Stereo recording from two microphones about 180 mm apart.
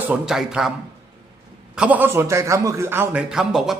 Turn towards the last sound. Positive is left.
turn(degrees=0)  # may be behind; listen again after turning